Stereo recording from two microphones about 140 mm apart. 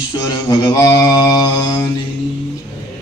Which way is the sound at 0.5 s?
25° left (ahead or behind).